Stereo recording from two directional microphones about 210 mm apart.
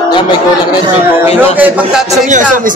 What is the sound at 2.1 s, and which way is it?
Speech, 35° right (ahead or behind).